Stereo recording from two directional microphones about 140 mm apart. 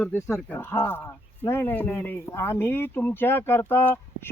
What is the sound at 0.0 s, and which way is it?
Speech, 15° left (ahead or behind).